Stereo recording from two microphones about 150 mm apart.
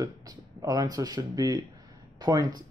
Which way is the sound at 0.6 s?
25° right (ahead or behind).